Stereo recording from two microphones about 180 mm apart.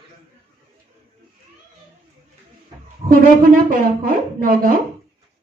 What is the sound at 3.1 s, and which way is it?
A woman's voice, 50° right (ahead or behind).